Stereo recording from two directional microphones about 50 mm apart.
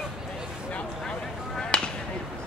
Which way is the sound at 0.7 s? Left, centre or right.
Left.